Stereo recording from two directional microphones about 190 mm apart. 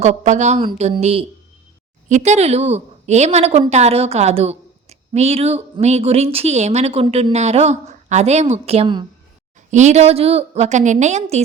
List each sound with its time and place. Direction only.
0.0 s a woman's voice: 35° right (ahead or behind)
9.6 s a woman's voice: 40° right (ahead or behind)